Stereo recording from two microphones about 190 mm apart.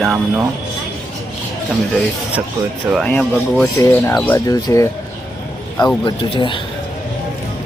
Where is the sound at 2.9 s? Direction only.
5° left (ahead or behind).